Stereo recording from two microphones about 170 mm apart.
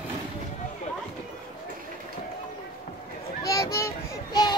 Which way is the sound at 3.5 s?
20° left (ahead or behind).